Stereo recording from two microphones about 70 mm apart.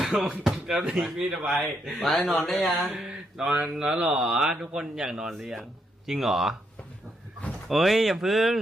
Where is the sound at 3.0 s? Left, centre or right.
Centre.